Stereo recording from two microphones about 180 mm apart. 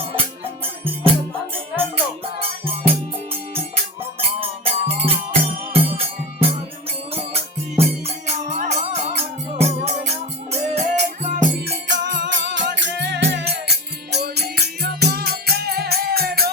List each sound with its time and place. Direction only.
0.2 s music: 30° right (ahead or behind)
2.4 s music: 30° right (ahead or behind)
4.2 s music: 30° right (ahead or behind)
11.5 s music: 65° right (ahead or behind)